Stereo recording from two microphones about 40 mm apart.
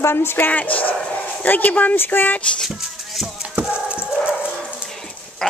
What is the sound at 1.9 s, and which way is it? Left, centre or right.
Speech, left.